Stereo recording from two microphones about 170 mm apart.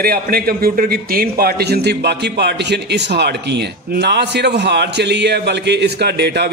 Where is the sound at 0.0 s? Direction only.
60° right (ahead or behind).